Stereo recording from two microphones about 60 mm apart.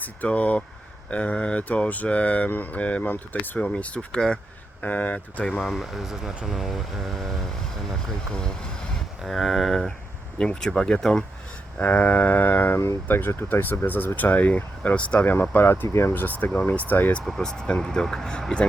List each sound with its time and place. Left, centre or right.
0.0 s speech: left
3.6 s speech: left
4.8 s speech: left
5.5 s speech: centre
10.3 s speech: centre
11.8 s speech: left
15.2 s speech: left
16.1 s speech: left
17.2 s speech: centre